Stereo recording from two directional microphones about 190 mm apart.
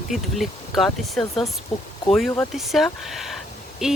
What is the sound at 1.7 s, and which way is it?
Speech, 35° left (ahead or behind).